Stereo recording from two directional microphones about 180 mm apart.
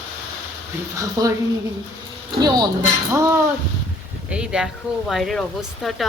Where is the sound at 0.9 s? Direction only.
20° right (ahead or behind).